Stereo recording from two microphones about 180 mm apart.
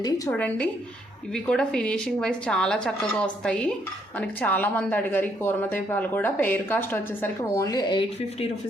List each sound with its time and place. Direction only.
0.3 s speech: 5° left (ahead or behind); by 8.4 s 25° left (ahead or behind)